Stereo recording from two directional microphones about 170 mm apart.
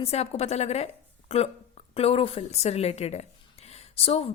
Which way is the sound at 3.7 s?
35° left (ahead or behind).